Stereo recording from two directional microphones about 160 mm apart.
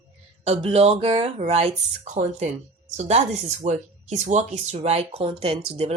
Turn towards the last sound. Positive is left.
turn(degrees=-40)  # may be behind; listen again after turning